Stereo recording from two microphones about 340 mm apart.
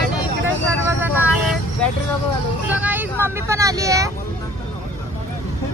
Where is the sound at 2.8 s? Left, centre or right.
Centre.